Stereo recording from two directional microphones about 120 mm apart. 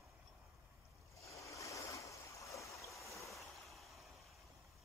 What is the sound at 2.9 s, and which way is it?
Stream, centre (ahead or behind).